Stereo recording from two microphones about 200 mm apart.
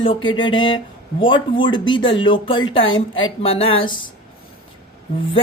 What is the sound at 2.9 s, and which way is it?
Speech, 75° left (ahead or behind).